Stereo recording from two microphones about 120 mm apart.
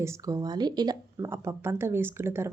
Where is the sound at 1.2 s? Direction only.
20° right (ahead or behind).